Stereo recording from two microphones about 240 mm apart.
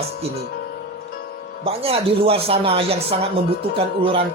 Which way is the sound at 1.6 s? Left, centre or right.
Right.